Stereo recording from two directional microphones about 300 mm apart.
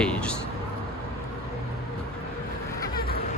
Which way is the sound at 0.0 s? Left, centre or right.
Centre.